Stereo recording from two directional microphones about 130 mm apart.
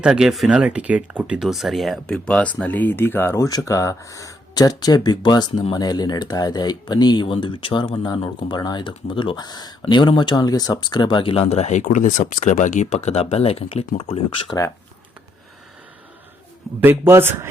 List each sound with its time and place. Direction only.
0.0 s speech: 5° right (ahead or behind); by 14.5 s 45° left (ahead or behind)
16.8 s a man's voice: 20° right (ahead or behind)